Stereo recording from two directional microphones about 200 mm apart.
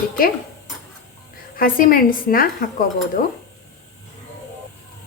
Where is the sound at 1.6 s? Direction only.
45° left (ahead or behind).